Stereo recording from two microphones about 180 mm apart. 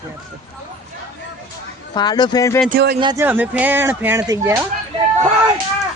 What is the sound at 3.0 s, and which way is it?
Speech, 25° right (ahead or behind).